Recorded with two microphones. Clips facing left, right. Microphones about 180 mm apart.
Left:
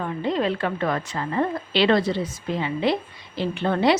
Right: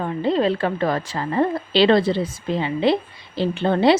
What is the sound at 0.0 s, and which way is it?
A woman's voice, 30° right (ahead or behind).